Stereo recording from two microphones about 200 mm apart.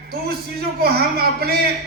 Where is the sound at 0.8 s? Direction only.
50° right (ahead or behind).